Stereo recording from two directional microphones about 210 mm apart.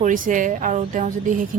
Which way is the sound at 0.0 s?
40° right (ahead or behind).